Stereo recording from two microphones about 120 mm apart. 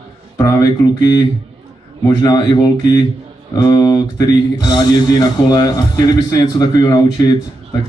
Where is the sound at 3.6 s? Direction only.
30° left (ahead or behind).